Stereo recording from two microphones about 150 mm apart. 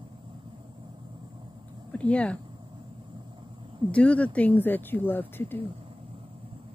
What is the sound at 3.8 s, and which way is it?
Speech, 10° left (ahead or behind).